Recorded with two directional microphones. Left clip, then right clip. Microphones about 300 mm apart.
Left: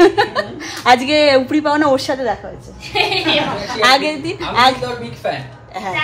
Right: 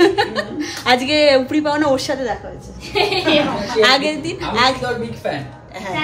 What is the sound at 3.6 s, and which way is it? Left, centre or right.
Speech, centre.